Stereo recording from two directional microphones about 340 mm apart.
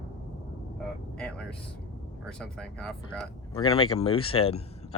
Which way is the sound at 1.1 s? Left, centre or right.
Centre.